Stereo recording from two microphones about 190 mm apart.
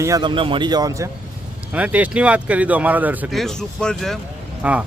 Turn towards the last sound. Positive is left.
turn(degrees=-5)  # may be behind; listen again after turning